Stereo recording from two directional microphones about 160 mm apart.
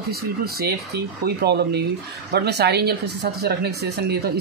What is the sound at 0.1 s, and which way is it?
Speech, 85° right.